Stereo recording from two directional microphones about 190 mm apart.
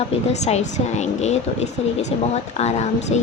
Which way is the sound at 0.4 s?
35° left (ahead or behind).